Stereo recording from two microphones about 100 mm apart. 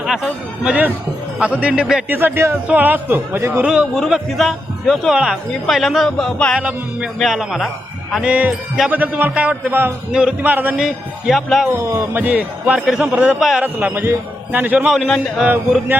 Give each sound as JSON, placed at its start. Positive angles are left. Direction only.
{"t": 0.0, "sound": "a man's voice", "side_deg": 0}
{"t": 2.0, "sound": "a man's voice", "side_deg": -20}
{"t": 3.9, "sound": "a man's voice", "side_deg": 0}
{"t": 6.6, "sound": "a man's voice", "side_deg": -15}
{"t": 7.2, "sound": "a man's voice", "side_deg": 0}
{"t": 8.2, "sound": "a man's voice", "side_deg": -10}
{"t": 10.1, "sound": "a man's voice", "side_deg": -10}
{"t": 10.8, "sound": "a man's voice", "side_deg": 0}
{"t": 11.7, "sound": "a man's voice", "side_deg": -25}
{"t": 13.7, "sound": "a man's voice", "side_deg": -20}
{"t": 14.9, "sound": "a man's voice", "side_deg": 0}